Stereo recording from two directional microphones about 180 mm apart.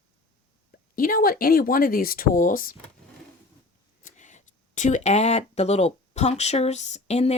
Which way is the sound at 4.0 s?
40° left (ahead or behind).